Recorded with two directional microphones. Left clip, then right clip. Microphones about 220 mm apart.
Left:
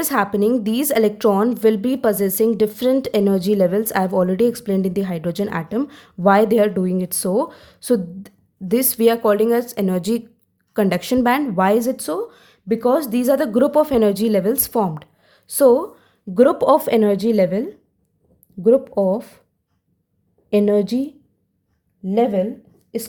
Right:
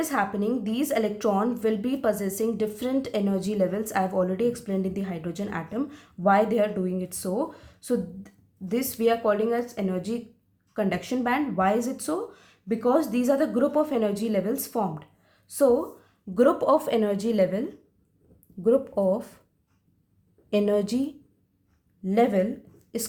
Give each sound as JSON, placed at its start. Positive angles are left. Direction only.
{"t": 0.0, "sound": "a woman's voice", "side_deg": 45}
{"t": 20.5, "sound": "speech", "side_deg": 25}
{"t": 22.0, "sound": "speech", "side_deg": 20}